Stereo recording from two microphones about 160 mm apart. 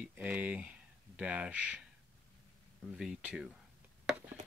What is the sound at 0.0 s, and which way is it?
Speech, 10° right (ahead or behind).